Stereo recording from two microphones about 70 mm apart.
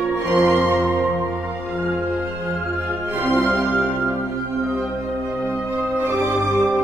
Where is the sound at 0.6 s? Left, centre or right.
Right.